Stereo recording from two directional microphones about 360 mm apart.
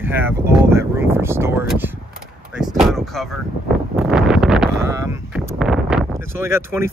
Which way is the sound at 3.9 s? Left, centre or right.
Centre.